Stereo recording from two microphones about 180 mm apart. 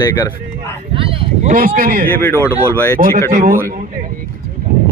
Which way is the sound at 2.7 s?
10° left (ahead or behind).